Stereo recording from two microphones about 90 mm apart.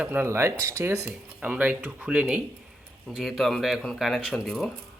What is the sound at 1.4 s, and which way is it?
Speech, 15° right (ahead or behind).